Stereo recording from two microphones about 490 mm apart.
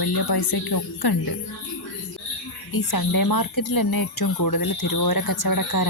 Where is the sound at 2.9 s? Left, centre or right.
Left.